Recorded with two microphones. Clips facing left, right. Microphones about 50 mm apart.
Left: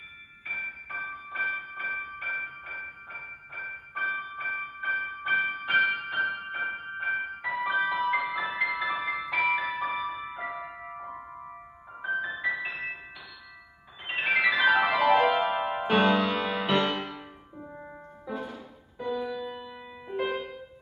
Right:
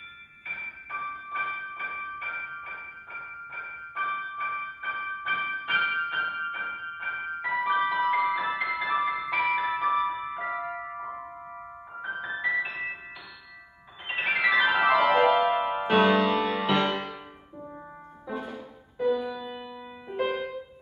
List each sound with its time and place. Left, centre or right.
0.5 s music: centre
12.0 s music: centre
14.0 s keyboard: centre
15.6 s music: centre